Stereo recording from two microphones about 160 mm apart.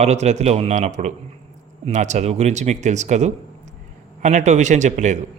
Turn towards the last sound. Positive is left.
turn(degrees=-50)  # may be behind; listen again after turning